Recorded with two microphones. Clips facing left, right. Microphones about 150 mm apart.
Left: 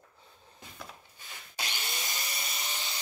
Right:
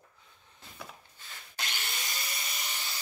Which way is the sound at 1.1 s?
15° left (ahead or behind).